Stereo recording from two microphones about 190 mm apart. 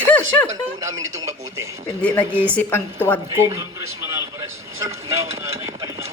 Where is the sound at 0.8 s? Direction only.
15° right (ahead or behind).